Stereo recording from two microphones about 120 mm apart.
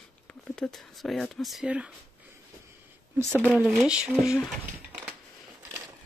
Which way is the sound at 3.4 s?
20° right (ahead or behind).